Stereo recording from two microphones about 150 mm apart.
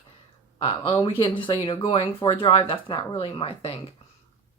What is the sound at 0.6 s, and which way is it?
Speech, 35° left (ahead or behind).